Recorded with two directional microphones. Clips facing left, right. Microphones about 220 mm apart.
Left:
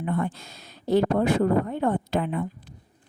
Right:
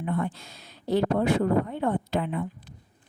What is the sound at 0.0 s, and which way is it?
Speech, 50° left (ahead or behind).